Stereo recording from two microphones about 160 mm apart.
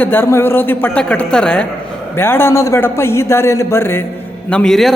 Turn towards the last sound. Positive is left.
turn(degrees=0)  # may be behind; listen again after turning